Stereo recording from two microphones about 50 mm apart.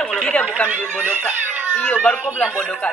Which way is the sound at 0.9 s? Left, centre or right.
Right.